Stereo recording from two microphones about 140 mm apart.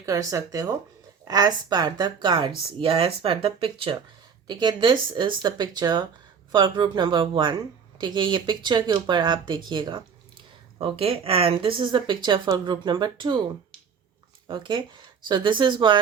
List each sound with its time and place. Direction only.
0.0 s speech: 25° right (ahead or behind); by 3.9 s 40° right (ahead or behind)
4.4 s speech: 30° right (ahead or behind)
10.8 s speech: 40° right (ahead or behind)
14.4 s speech: 35° right (ahead or behind)